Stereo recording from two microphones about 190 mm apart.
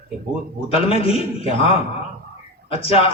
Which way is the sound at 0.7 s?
30° left (ahead or behind).